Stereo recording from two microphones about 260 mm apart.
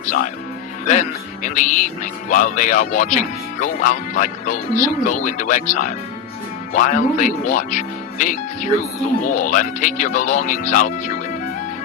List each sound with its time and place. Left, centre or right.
0.9 s speech: left